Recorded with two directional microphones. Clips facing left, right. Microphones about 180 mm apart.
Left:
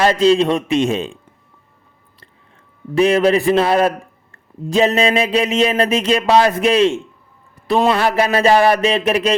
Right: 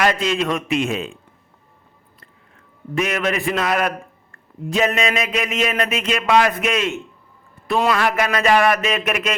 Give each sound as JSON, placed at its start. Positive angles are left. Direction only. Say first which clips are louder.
{"t": 0.0, "sound": "speech", "louder": "left 7 dB", "side_deg": 30}
{"t": 2.9, "sound": "speech", "louder": "left 8 dB", "side_deg": 30}